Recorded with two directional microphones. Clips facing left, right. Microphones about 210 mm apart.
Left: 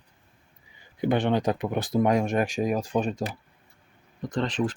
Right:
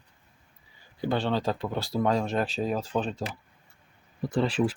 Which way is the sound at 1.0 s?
20° left (ahead or behind).